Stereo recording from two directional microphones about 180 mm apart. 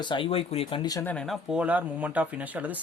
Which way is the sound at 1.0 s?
5° left (ahead or behind).